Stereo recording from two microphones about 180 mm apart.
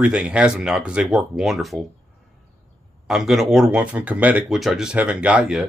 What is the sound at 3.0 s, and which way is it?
Speech, centre (ahead or behind).